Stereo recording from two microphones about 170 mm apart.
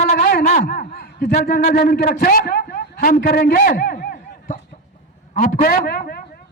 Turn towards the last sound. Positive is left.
turn(degrees=60)  # may be behind; listen again after turning